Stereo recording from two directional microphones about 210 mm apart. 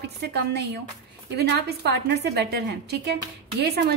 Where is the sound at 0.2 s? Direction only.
50° right (ahead or behind).